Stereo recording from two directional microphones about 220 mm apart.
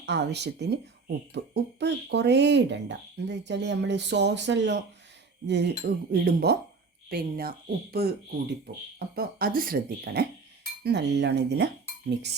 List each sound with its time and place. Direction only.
0.0 s speech: 50° right (ahead or behind)